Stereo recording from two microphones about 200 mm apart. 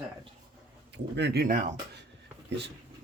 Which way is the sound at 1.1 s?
55° right (ahead or behind).